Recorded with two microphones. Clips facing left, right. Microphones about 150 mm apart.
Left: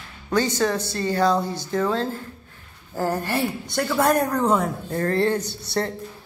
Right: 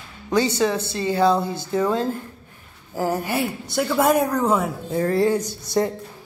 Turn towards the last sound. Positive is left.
turn(degrees=-10)  # may be behind; listen again after turning